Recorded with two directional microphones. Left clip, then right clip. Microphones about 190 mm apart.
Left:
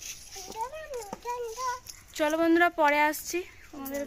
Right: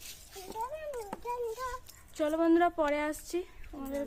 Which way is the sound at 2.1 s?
Centre (ahead or behind).